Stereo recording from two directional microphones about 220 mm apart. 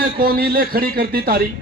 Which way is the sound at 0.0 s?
45° right (ahead or behind).